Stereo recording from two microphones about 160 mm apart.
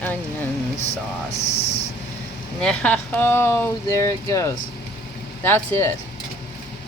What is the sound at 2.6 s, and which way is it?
Speech, 5° left (ahead or behind).